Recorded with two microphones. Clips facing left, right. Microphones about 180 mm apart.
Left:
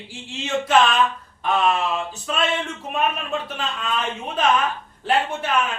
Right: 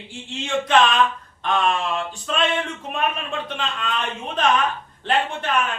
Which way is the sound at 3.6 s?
5° left (ahead or behind).